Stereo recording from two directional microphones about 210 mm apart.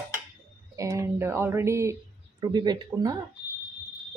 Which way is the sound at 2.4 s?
20° right (ahead or behind).